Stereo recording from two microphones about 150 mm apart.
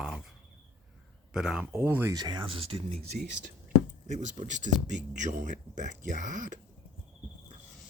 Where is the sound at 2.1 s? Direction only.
25° right (ahead or behind); by 6.6 s 55° right (ahead or behind).